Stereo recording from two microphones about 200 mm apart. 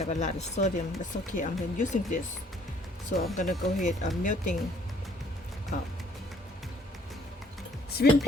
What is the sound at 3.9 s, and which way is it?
Speech, 40° left (ahead or behind).